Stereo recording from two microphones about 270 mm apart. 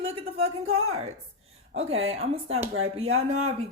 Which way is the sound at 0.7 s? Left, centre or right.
Right.